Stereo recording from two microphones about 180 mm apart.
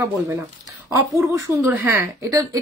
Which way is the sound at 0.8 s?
20° right (ahead or behind).